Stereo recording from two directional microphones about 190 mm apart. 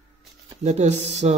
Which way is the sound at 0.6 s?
35° right (ahead or behind).